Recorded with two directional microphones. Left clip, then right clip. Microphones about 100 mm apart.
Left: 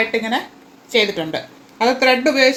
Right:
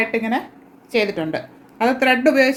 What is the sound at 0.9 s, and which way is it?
A woman's voice, 15° right (ahead or behind).